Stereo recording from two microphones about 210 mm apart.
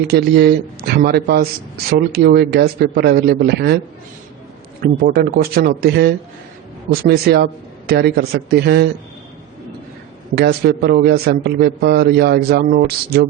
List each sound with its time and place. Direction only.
0.1 s speech: 50° right (ahead or behind)
4.8 s speech: 45° right (ahead or behind)
10.3 s speech: 50° right (ahead or behind)